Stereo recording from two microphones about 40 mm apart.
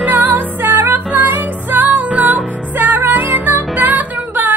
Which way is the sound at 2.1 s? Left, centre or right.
Right.